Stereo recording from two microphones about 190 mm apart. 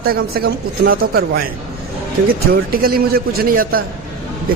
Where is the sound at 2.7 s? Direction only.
50° right (ahead or behind).